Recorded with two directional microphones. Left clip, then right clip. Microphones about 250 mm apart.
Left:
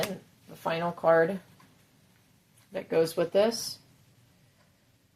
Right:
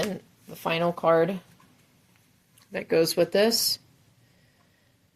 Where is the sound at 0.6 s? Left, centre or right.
Right.